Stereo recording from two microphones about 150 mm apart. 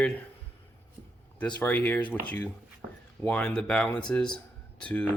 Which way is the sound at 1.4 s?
10° left (ahead or behind).